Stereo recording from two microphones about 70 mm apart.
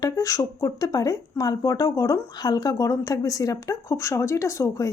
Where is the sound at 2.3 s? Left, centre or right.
Left.